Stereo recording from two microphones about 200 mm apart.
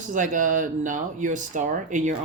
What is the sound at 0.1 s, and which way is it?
Speech, 40° right (ahead or behind).